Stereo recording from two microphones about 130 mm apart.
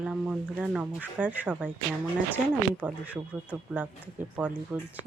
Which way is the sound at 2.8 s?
10° right (ahead or behind).